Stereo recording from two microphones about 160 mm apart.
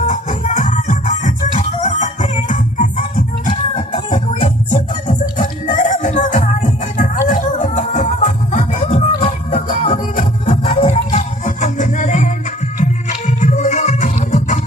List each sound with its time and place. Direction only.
0.1 s music: 50° left (ahead or behind)
3.8 s music: 35° left (ahead or behind)
5.4 s music: 50° left (ahead or behind)